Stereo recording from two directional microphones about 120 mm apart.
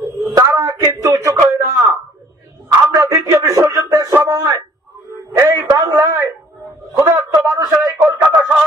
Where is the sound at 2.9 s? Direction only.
25° right (ahead or behind).